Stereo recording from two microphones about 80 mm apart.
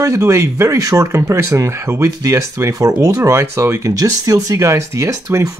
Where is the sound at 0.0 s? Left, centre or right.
Right.